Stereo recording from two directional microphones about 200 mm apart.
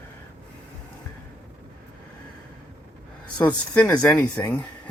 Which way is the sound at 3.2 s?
5° left (ahead or behind).